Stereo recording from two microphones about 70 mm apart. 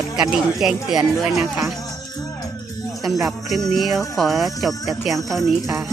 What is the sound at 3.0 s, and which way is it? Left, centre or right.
Music, centre.